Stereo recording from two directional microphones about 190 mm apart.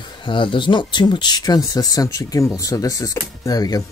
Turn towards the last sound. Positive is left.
turn(degrees=20)  # may be behind; listen again after turning